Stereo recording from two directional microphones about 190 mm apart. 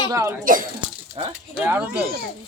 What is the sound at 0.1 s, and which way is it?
Speech, 15° right (ahead or behind).